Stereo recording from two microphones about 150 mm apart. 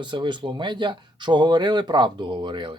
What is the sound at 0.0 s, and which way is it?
Speech, 30° right (ahead or behind).